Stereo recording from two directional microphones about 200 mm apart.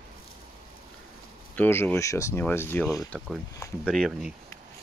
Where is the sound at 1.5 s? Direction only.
10° left (ahead or behind).